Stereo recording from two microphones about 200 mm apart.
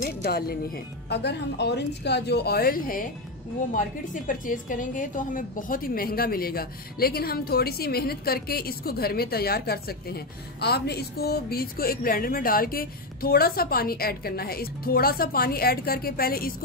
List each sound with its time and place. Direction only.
0.0 s a woman's voice: 50° left (ahead or behind)